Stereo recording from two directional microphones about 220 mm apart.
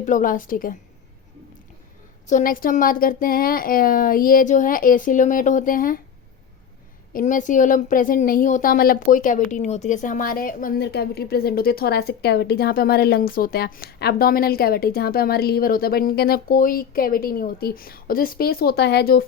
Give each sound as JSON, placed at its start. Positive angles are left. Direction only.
{"t": 0.0, "sound": "speech", "side_deg": 35}
{"t": 2.2, "sound": "speech", "side_deg": 35}
{"t": 7.1, "sound": "a woman's voice", "side_deg": 35}